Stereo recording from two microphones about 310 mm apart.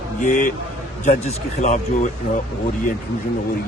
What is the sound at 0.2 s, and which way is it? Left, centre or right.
Speech, left.